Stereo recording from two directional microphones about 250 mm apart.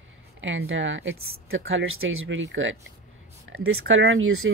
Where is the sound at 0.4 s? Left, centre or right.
Right.